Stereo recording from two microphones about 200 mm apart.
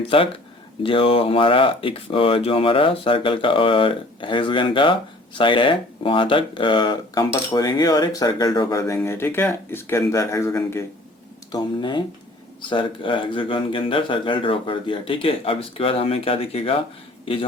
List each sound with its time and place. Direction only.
0.1 s speech: 25° left (ahead or behind)